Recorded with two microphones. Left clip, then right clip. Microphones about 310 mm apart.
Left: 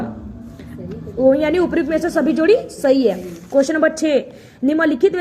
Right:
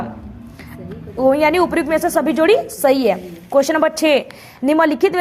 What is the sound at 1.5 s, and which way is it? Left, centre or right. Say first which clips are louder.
A woman's voice: right 2 dB; right.